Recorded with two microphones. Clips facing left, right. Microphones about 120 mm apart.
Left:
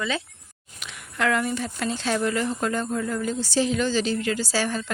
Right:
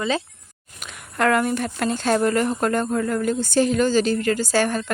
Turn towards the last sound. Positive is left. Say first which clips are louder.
# right 5 dB
turn(degrees=-50)  # may be behind; listen again after turning